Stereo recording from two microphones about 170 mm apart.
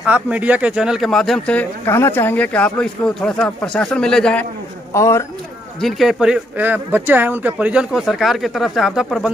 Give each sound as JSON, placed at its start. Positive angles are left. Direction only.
{"t": 0.0, "sound": "speech", "side_deg": -10}
{"t": 4.9, "sound": "speech", "side_deg": 15}
{"t": 5.8, "sound": "speech", "side_deg": 0}